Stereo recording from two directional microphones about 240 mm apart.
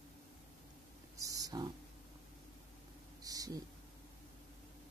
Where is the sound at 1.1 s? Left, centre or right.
Centre.